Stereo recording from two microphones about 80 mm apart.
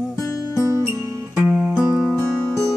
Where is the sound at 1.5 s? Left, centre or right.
Centre.